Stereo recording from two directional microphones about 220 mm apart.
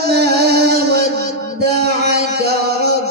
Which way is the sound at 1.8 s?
45° right (ahead or behind).